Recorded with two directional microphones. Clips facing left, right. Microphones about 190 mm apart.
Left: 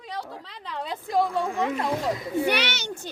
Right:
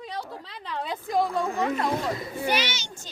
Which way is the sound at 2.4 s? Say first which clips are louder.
Right 2 dB; 65° left (ahead or behind).